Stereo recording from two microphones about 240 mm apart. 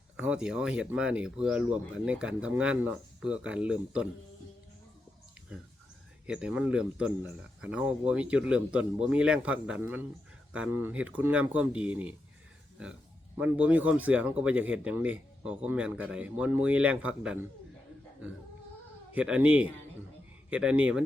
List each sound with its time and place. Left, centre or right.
0.2 s speech: centre
5.5 s speech: centre
13.3 s speech: centre
19.1 s speech: centre